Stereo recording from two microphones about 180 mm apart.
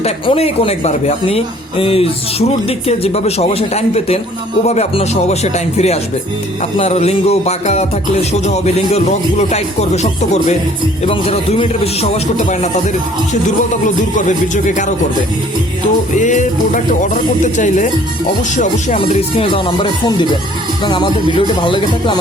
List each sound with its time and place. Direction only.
0.0 s speech: 35° left (ahead or behind)
13.8 s speech: 45° left (ahead or behind)
16.1 s speech: 45° left (ahead or behind)
19.4 s music: 30° left (ahead or behind)